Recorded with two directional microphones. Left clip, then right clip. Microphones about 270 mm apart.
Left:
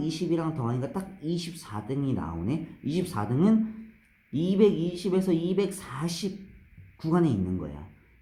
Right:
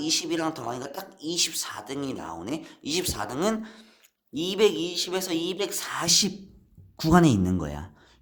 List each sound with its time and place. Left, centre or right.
0.0 s speech: right